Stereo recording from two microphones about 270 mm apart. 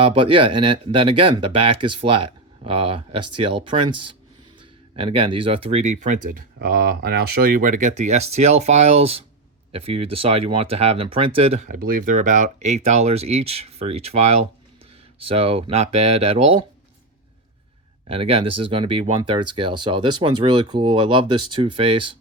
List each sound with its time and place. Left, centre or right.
0.0 s speech: centre
18.1 s speech: right